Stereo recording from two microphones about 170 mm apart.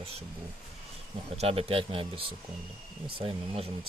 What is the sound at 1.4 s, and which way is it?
Speech, 35° right (ahead or behind).